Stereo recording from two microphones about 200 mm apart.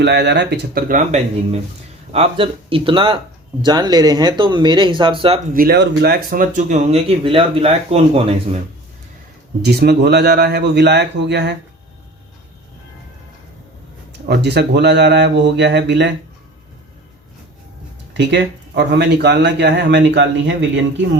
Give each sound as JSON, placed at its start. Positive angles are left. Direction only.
{"t": 0.0, "sound": "speech", "side_deg": -60}
{"t": 5.5, "sound": "speech", "side_deg": -50}
{"t": 9.6, "sound": "speech", "side_deg": -55}
{"t": 14.1, "sound": "speech", "side_deg": -55}
{"t": 18.1, "sound": "speech", "side_deg": -60}